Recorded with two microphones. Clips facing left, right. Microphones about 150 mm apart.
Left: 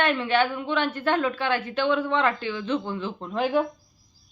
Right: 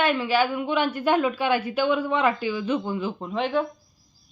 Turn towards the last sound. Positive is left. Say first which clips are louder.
# left 1 dB
turn(degrees=10)  # may be behind; listen again after turning